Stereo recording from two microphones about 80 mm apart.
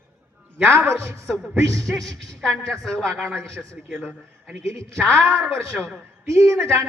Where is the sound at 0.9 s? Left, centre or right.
Right.